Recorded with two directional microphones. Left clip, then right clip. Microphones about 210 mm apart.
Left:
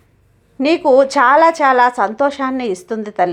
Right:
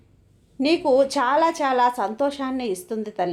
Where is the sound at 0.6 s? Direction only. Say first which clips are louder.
Left 7 dB; 20° left (ahead or behind).